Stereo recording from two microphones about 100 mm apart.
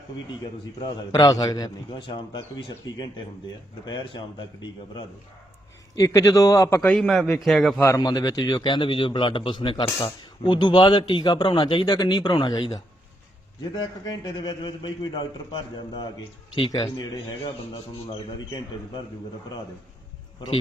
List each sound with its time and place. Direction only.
0.8 s a man's voice: 40° left (ahead or behind)
6.0 s a man's voice: 30° left (ahead or behind)
6.8 s a man's voice: 15° left (ahead or behind)
7.3 s a man's voice: centre (ahead or behind)
7.8 s speech: 25° left (ahead or behind)
8.0 s a man's voice: 45° left (ahead or behind)
11.9 s a man's voice: 45° left (ahead or behind)
16.6 s speech: 60° left (ahead or behind)
17.0 s a man's voice: 45° left (ahead or behind)